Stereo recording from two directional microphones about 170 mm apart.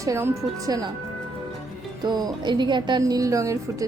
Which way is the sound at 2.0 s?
25° right (ahead or behind).